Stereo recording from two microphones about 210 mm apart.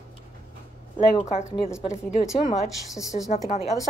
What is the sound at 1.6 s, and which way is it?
Speech, 15° left (ahead or behind).